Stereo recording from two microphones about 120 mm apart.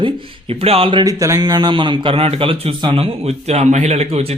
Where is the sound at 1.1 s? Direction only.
25° right (ahead or behind).